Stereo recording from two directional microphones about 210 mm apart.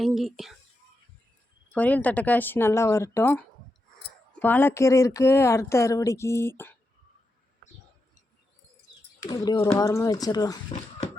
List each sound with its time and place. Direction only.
0.0 s speech: centre (ahead or behind)
1.7 s speech: 5° left (ahead or behind)
9.2 s speech: 20° left (ahead or behind)